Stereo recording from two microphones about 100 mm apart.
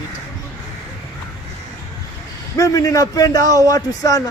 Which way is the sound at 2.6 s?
35° left (ahead or behind).